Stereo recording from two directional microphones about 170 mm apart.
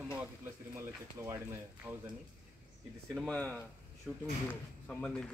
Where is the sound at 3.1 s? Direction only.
5° left (ahead or behind).